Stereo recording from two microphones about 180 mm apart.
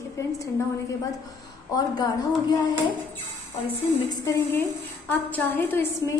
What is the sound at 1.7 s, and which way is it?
Speech, 20° left (ahead or behind).